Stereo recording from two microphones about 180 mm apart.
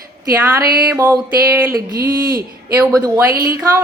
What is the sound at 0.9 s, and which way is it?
A woman's voice, 15° right (ahead or behind).